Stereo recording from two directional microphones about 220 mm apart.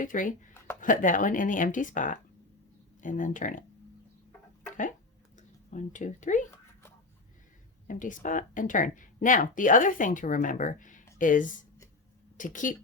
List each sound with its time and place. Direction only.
0.0 s speech: 35° left (ahead or behind)
5.4 s speech: 35° left (ahead or behind)
7.9 s speech: 35° left (ahead or behind)